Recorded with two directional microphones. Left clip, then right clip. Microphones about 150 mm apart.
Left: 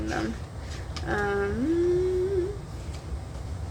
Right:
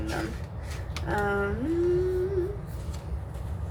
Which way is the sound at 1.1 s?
35° left (ahead or behind).